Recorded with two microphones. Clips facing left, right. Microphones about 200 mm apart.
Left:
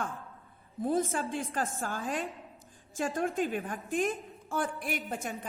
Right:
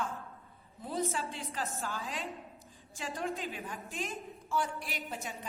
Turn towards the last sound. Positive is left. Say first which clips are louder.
# left 6 dB
turn(degrees=50)  # may be behind; listen again after turning